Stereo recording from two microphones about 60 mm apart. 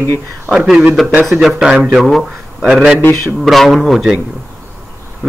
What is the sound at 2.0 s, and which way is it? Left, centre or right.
Speech, centre.